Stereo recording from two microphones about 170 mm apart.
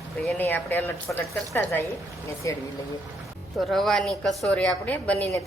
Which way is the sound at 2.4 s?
15° left (ahead or behind).